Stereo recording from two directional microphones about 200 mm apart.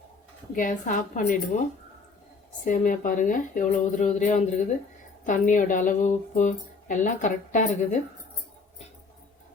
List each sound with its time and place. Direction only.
0.5 s speech: 40° left (ahead or behind)
2.6 s speech: 40° left (ahead or behind)